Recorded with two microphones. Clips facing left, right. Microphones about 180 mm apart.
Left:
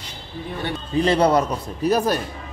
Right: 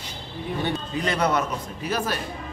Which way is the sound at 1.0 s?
30° left (ahead or behind).